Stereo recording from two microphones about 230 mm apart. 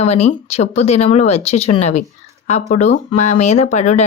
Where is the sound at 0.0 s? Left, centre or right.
Left.